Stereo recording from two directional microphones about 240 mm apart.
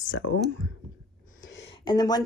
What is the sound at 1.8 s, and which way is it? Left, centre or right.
Speech, centre.